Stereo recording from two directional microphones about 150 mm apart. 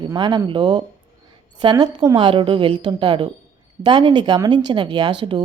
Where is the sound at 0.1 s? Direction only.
30° right (ahead or behind).